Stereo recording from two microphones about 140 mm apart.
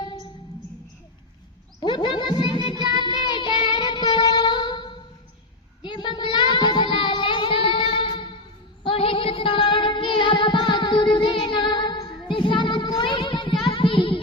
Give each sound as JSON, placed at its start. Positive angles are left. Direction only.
{"t": 1.8, "sound": "a sound", "side_deg": 35}
{"t": 2.9, "sound": "child singing", "side_deg": 30}
{"t": 8.8, "sound": "female singing", "side_deg": 40}